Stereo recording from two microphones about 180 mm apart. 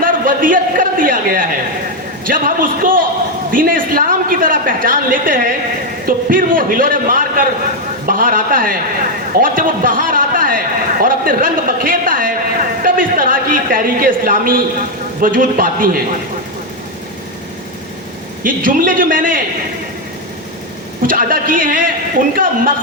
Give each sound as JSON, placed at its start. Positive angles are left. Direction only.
{"t": 0.0, "sound": "a man's voice", "side_deg": -50}
{"t": 18.4, "sound": "a woman's voice", "side_deg": -50}
{"t": 21.0, "sound": "a woman's voice", "side_deg": -50}